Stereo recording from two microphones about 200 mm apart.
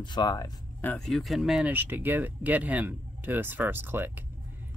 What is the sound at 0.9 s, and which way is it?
Speech, centre (ahead or behind).